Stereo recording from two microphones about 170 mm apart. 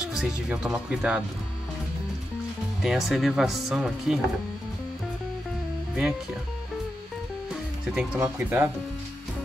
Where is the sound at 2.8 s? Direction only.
Centre (ahead or behind).